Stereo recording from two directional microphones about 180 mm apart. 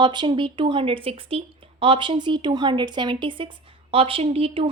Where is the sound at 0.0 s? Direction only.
25° right (ahead or behind).